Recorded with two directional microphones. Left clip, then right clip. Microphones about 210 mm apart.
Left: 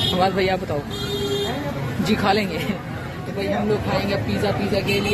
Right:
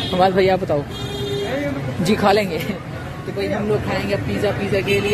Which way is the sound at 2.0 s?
20° right (ahead or behind).